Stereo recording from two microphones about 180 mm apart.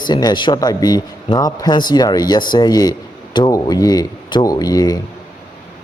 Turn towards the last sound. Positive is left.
turn(degrees=20)  # may be behind; listen again after turning